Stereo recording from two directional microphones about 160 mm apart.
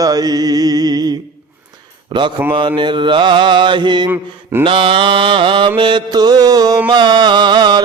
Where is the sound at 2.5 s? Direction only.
30° right (ahead or behind).